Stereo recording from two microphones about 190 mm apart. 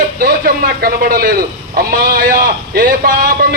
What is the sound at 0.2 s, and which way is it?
A man's voice, 50° right (ahead or behind).